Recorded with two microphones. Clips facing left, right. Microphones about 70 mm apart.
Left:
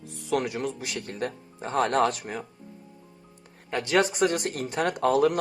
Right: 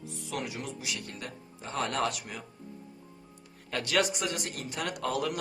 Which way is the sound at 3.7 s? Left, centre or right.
Left.